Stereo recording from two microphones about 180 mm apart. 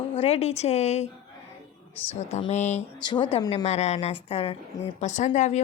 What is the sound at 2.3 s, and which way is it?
Speech, 40° left (ahead or behind).